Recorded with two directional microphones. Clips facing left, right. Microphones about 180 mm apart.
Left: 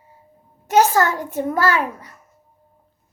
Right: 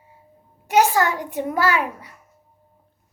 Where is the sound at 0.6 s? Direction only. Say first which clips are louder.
Left 2 dB; 15° right (ahead or behind).